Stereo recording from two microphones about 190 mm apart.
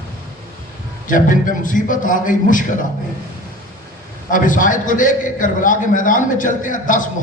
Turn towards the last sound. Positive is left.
turn(degrees=45)  # may be behind; listen again after turning